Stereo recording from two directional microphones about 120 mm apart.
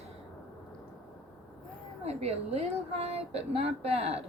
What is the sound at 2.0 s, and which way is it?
A woman's voice, 60° right (ahead or behind).